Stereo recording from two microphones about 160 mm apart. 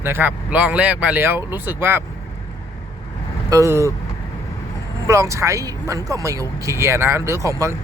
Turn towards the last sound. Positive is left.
turn(degrees=-20)  # may be behind; listen again after turning